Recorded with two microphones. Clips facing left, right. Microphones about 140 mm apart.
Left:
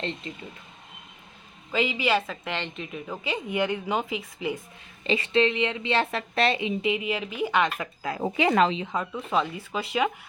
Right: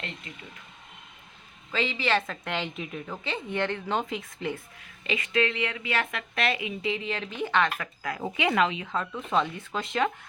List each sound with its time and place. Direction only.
0.3 s speech: 30° left (ahead or behind)
1.7 s a woman's voice: 15° left (ahead or behind)
5.0 s speech: 30° left (ahead or behind)
6.9 s speech: 10° left (ahead or behind); by 8.9 s 30° left (ahead or behind)
8.9 s a woman's voice: 10° left (ahead or behind)